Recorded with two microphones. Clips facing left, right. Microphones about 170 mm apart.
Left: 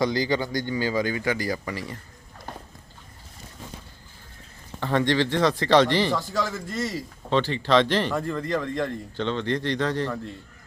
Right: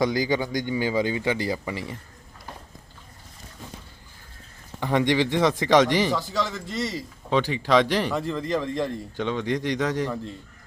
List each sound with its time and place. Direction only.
0.0 s a man's voice: 15° right (ahead or behind)
4.8 s speech: 15° right (ahead or behind)
6.1 s a man's voice: centre (ahead or behind)
7.3 s speech: 10° right (ahead or behind)